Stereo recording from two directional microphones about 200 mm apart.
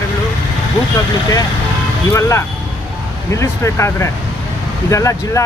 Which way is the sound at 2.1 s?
15° left (ahead or behind).